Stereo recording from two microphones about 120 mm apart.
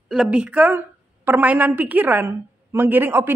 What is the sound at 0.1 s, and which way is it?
A woman's voice, 5° right (ahead or behind).